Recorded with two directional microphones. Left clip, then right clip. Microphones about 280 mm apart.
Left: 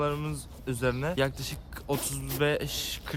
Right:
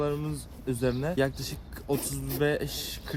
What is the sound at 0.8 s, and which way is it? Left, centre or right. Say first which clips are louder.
Speech: even; left.